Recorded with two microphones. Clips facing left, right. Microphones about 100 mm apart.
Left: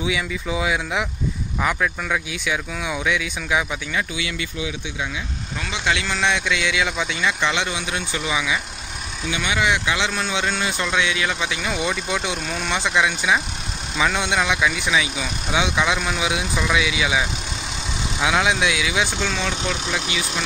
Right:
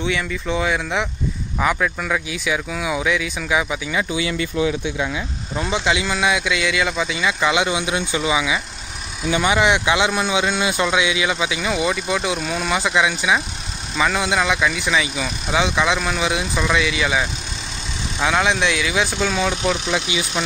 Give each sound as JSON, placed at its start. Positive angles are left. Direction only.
{"t": 0.0, "sound": "speech", "side_deg": 5}
{"t": 4.1, "sound": "speech", "side_deg": -30}
{"t": 5.9, "sound": "speech", "side_deg": -15}
{"t": 9.3, "sound": "speech", "side_deg": -35}
{"t": 9.7, "sound": "speech", "side_deg": -20}